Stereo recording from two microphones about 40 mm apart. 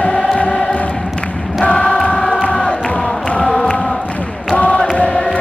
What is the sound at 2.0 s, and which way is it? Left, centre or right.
Music, left.